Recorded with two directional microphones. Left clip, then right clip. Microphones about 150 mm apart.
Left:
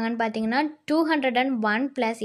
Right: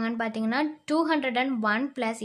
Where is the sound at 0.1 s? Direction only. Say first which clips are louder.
Left 4 dB; 20° left (ahead or behind).